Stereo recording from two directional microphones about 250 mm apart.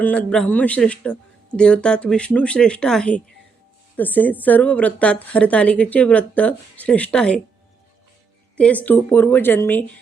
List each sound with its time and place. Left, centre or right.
0.0 s a woman's voice: centre
8.5 s a woman's voice: centre